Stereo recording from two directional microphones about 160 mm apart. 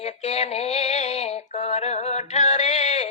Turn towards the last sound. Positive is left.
turn(degrees=40)  # may be behind; listen again after turning